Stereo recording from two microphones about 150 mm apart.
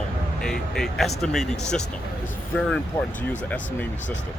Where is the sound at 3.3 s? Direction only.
10° left (ahead or behind).